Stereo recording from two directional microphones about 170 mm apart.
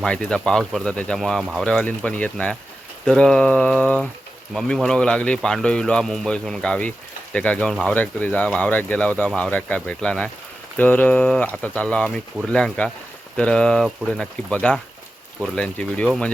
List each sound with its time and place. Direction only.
0.0 s speech: 5° left (ahead or behind)